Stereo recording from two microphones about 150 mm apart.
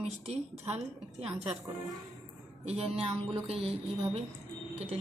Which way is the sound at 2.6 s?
45° right (ahead or behind).